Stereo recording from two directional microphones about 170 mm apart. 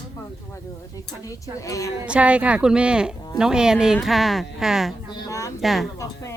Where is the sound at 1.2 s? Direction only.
20° left (ahead or behind).